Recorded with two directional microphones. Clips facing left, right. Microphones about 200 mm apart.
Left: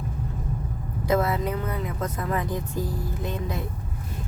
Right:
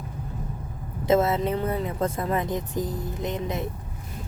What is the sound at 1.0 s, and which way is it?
Speech, 25° right (ahead or behind).